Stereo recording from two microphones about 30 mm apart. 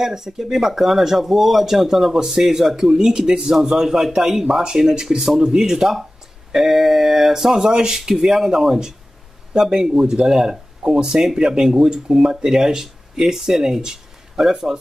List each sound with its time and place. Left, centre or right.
0.0 s speech: centre
2.1 s speech: right
3.0 s speech: right